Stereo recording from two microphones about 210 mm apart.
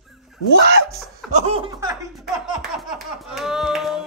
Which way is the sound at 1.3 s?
30° right (ahead or behind).